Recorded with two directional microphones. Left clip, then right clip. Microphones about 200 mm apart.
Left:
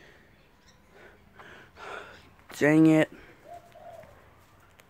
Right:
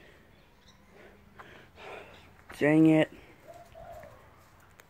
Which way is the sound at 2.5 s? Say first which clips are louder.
Left 2 dB; 15° left (ahead or behind).